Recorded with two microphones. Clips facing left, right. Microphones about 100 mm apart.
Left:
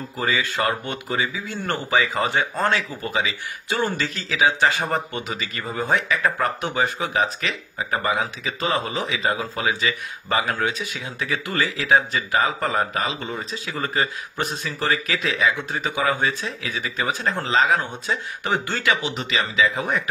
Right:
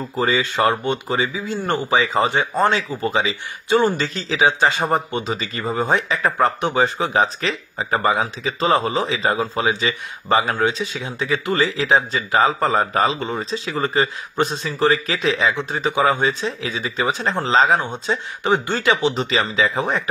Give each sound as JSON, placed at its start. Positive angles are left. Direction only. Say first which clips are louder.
{"t": 0.2, "sound": "speech", "louder": "right 5 dB", "side_deg": -25}